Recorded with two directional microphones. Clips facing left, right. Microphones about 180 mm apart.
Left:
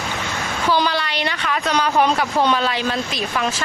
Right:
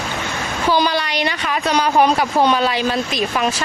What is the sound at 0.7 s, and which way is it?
Speech, 15° right (ahead or behind).